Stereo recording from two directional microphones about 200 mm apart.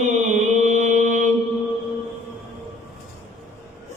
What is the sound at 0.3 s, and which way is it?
Mantra, 40° right (ahead or behind).